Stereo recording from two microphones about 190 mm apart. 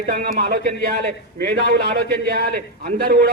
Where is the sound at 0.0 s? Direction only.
50° right (ahead or behind).